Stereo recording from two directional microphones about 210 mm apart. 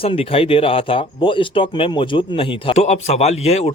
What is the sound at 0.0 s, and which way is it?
Speech, 25° left (ahead or behind).